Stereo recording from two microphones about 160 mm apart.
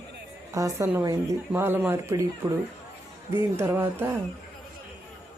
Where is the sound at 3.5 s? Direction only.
15° right (ahead or behind).